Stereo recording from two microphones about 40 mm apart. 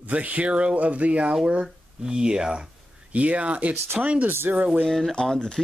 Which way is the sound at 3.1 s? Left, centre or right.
Right.